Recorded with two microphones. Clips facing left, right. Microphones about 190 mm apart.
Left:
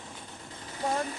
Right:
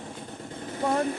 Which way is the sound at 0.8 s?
55° right (ahead or behind).